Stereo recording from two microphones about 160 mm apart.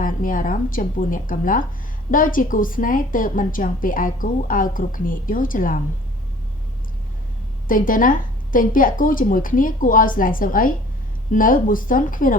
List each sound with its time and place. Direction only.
0.0 s a woman's voice: 55° left (ahead or behind)
7.7 s a woman's voice: 60° left (ahead or behind)